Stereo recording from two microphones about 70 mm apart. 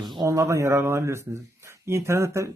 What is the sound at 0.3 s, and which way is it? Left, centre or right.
Speech, right.